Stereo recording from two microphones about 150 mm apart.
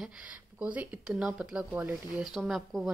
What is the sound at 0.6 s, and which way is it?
Speech, 5° right (ahead or behind).